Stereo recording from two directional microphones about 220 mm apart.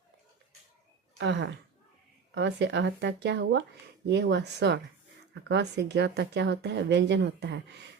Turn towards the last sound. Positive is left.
turn(degrees=-50)  # may be behind; listen again after turning